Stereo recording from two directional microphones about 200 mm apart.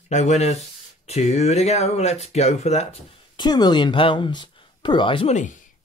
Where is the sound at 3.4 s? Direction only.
20° left (ahead or behind).